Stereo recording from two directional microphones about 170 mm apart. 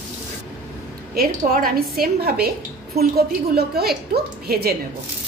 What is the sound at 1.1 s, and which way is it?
A woman's voice, 55° right (ahead or behind).